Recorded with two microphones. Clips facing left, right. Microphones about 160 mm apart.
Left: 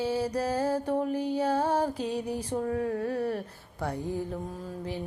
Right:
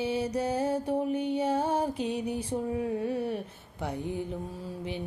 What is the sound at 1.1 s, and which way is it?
Music, 35° left (ahead or behind).